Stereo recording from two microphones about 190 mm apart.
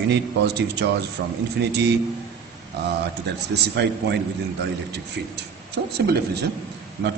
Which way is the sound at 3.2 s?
60° right (ahead or behind).